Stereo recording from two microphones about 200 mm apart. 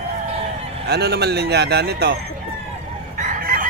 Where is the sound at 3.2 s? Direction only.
45° right (ahead or behind).